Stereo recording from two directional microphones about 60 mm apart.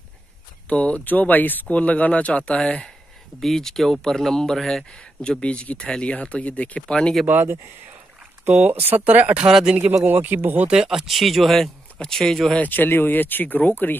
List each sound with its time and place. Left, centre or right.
0.7 s speech: left
3.3 s speech: centre; by 6.8 s left
6.9 s speech: centre
8.6 s speech: right
9.5 s speech: centre
10.0 s speech: right
10.7 s speech: centre
12.5 s speech: left